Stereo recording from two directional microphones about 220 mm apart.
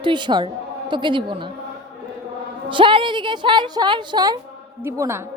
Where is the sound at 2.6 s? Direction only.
20° right (ahead or behind).